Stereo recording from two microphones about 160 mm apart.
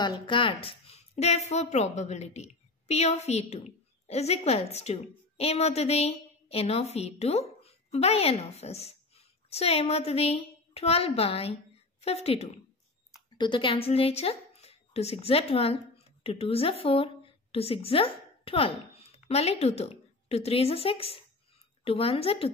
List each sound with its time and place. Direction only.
0.0 s a woman's voice: 30° left (ahead or behind)